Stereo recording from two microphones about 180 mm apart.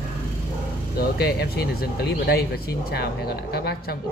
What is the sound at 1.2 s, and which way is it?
Speech, 60° left (ahead or behind).